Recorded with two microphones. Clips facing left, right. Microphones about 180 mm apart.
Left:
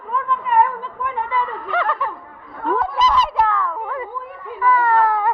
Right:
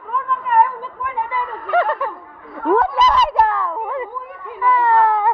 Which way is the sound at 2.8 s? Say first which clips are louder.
Right 1 dB; 55° right (ahead or behind).